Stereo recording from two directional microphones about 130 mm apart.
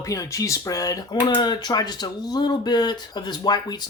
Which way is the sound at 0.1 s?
25° left (ahead or behind).